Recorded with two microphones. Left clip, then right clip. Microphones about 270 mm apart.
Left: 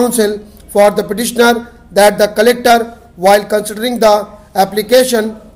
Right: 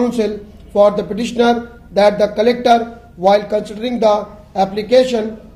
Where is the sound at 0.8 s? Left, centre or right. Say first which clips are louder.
Left 3 dB; left.